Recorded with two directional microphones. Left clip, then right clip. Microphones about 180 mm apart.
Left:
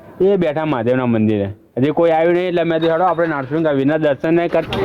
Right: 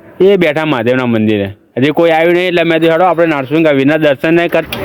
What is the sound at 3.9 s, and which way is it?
Speech, 30° right (ahead or behind).